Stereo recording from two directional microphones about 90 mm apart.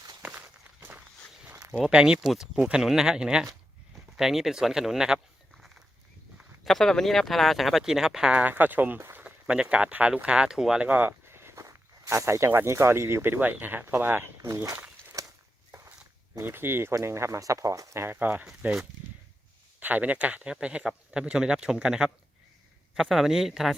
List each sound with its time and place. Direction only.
0.3 s walk: 20° right (ahead or behind)
1.9 s speech: 10° right (ahead or behind)
6.7 s speech: 5° left (ahead or behind); by 9.2 s 25° right (ahead or behind)
9.2 s speech: 15° right (ahead or behind)
11.3 s walk: 25° right (ahead or behind)
11.6 s speech: 35° right (ahead or behind)
14.4 s speech: 35° right (ahead or behind)
15.2 s a sound: 40° right (ahead or behind)
16.4 s speech: 25° right (ahead or behind)
18.4 s speech: 5° right (ahead or behind)
19.8 s speech: 15° right (ahead or behind)